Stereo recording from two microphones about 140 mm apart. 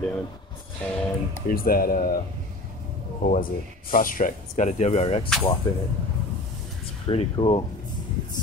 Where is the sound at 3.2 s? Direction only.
75° left (ahead or behind); by 5.2 s 50° left (ahead or behind).